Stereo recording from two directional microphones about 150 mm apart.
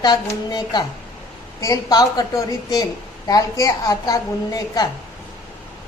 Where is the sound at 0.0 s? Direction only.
25° left (ahead or behind).